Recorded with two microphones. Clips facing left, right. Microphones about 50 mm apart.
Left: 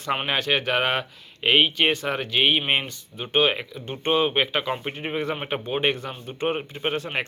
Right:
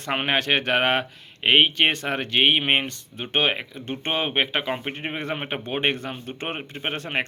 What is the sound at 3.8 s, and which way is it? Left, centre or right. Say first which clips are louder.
Speech: left 4 dB; right.